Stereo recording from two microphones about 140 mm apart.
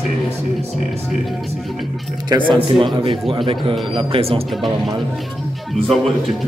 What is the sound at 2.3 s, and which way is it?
Speech, 35° right (ahead or behind).